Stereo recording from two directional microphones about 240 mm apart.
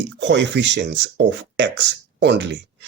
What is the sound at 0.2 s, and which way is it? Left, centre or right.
Speech, right.